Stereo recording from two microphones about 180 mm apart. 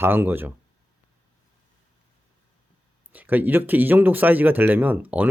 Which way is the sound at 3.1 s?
10° right (ahead or behind).